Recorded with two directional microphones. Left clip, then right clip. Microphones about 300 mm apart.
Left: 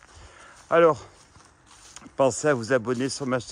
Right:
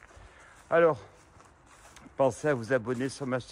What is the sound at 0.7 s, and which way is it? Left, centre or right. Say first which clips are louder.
Speech: left 5 dB; left.